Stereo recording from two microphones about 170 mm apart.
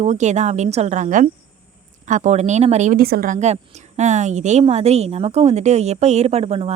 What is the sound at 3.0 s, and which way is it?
A woman's voice, 60° right (ahead or behind).